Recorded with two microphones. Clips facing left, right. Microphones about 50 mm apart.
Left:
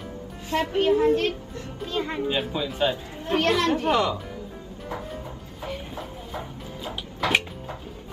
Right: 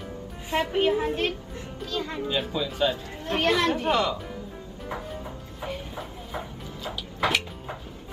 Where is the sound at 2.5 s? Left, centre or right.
Centre.